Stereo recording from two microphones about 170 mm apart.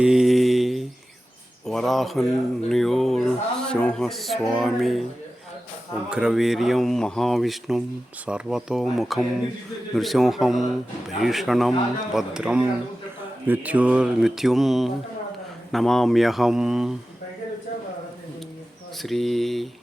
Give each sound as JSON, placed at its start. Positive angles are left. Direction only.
{"t": 0.0, "sound": "mantra", "side_deg": -5}
{"t": 1.6, "sound": "speech", "side_deg": 0}
{"t": 6.1, "sound": "speech", "side_deg": -5}
{"t": 19.0, "sound": "speech", "side_deg": 0}